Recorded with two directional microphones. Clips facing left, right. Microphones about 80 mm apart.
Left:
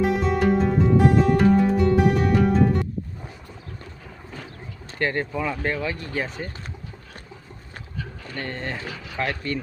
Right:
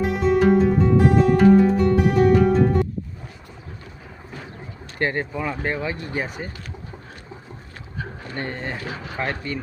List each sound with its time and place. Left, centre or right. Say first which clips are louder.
0.0 s music: right 3 dB; centre
4.9 s speech: right 1 dB; centre
7.9 s a sound: right 3 dB; right
8.4 s speech: left 1 dB; centre
8.9 s speech: right 1 dB; right